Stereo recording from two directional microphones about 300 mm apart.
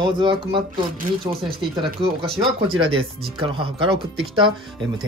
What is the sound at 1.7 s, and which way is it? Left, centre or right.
Speech, centre.